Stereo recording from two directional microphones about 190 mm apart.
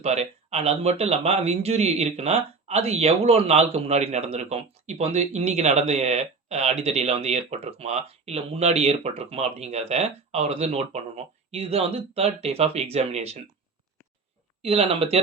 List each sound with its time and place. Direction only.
0.0 s speech: 35° right (ahead or behind)
14.6 s speech: 30° right (ahead or behind)